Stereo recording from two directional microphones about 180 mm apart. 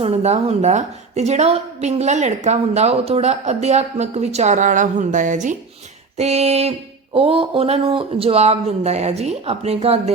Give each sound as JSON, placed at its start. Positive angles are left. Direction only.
{"t": 0.0, "sound": "a woman's voice", "side_deg": -35}